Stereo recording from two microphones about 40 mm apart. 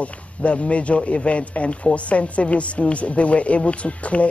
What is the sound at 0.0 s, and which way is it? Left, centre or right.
A man's voice, left.